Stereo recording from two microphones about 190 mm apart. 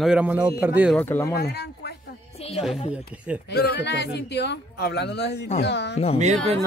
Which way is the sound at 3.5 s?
60° left (ahead or behind).